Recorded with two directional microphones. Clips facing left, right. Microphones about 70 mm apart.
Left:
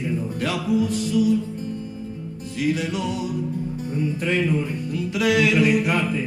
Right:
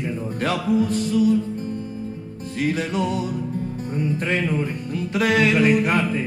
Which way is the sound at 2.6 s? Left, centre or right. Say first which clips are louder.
Right 1 dB; right.